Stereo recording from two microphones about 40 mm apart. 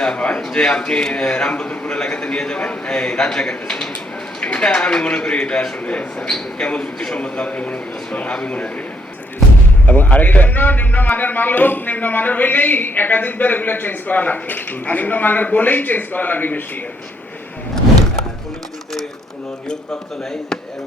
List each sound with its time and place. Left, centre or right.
0.0 s a man's voice: left
6.2 s a man's voice: centre
7.2 s a man's voice: left
8.3 s a man's voice: left
9.8 s a man's voice: left